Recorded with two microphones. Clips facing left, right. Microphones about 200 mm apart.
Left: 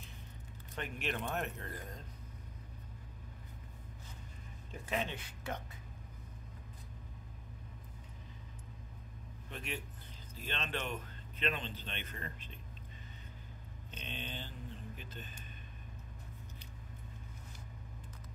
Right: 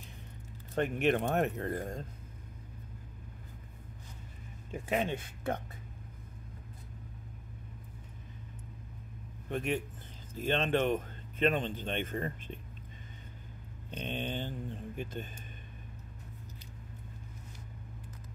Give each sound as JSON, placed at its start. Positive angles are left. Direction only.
{"t": 0.7, "sound": "a man's voice", "side_deg": -50}
{"t": 4.6, "sound": "speech", "side_deg": -50}
{"t": 9.5, "sound": "a man's voice", "side_deg": -50}
{"t": 13.8, "sound": "a man's voice", "side_deg": -50}